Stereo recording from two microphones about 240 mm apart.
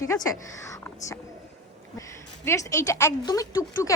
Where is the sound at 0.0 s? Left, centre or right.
Centre.